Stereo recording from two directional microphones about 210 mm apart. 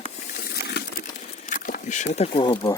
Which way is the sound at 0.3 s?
45° left (ahead or behind).